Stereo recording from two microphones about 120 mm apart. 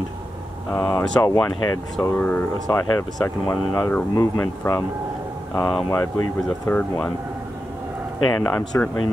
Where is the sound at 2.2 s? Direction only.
10° left (ahead or behind).